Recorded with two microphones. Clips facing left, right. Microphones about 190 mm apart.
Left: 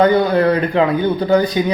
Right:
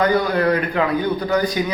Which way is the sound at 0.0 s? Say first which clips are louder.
Left 5 dB; 25° left (ahead or behind).